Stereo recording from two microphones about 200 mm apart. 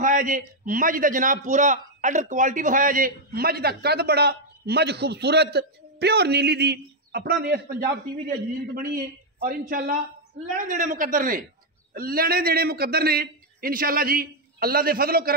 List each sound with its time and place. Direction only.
0.0 s a man's voice: 40° right (ahead or behind)